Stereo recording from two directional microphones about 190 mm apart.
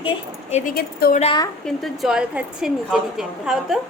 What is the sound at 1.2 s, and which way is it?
Speech, 25° left (ahead or behind).